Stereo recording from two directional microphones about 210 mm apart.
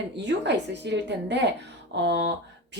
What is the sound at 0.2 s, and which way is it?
Speech, 55° right (ahead or behind).